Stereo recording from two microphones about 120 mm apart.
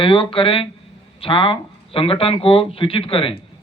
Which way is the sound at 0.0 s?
45° left (ahead or behind).